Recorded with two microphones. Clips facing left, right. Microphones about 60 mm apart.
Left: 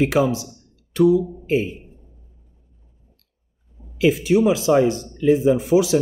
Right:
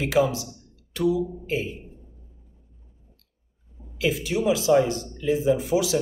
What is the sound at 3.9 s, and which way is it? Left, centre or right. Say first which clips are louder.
Speech: left 8 dB; left.